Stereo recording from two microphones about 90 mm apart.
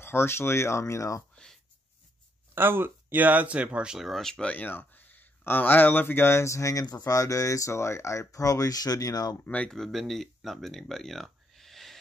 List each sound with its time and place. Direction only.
0.0 s speech: 25° left (ahead or behind)
1.3 s a sound: 5° left (ahead or behind)
2.5 s speech: 25° right (ahead or behind); by 9.4 s 45° left (ahead or behind)
9.5 s speech: 15° left (ahead or behind)
9.8 s speech: centre (ahead or behind)